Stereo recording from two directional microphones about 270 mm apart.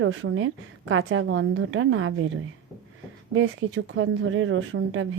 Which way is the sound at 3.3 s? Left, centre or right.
Right.